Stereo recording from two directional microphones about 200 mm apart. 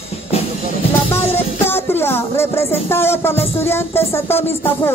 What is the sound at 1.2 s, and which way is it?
Music, 30° left (ahead or behind).